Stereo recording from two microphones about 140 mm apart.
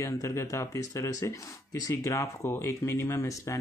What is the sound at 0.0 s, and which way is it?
Speech, 20° left (ahead or behind).